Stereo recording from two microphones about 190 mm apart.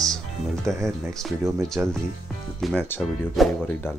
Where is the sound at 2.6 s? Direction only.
Centre (ahead or behind).